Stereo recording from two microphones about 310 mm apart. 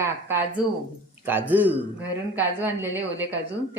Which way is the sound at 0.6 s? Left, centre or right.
Centre.